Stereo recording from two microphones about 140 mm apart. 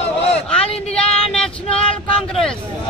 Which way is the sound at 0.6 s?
45° left (ahead or behind).